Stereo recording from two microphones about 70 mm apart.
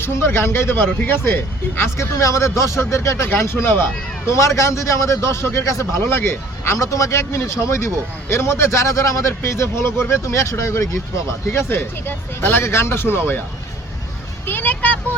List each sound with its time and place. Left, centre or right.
0.0 s a man's voice: left
11.5 s speech: left
14.4 s a child's voice: left